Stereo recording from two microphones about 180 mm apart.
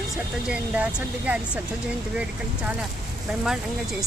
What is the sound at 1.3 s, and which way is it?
Speech, 10° right (ahead or behind).